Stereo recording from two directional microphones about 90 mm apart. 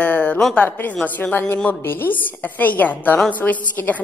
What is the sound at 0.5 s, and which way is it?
A woman's voice, 15° left (ahead or behind).